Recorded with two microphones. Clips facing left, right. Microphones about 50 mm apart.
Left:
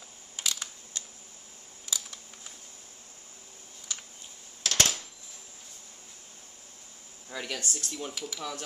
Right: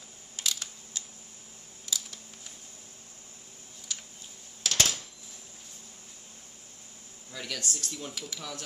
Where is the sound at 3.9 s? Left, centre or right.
Centre.